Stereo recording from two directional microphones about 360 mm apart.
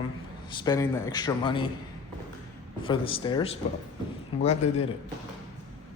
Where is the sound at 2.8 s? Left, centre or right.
Centre.